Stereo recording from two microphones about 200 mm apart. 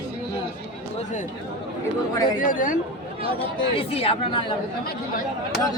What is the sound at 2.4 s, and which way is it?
Speech, 40° left (ahead or behind).